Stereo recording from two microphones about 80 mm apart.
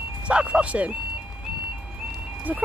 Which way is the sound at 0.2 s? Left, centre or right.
Centre.